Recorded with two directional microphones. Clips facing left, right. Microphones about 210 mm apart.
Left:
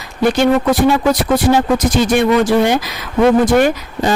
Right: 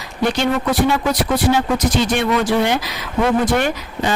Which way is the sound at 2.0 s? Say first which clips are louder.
Left 5 dB; 45° left (ahead or behind).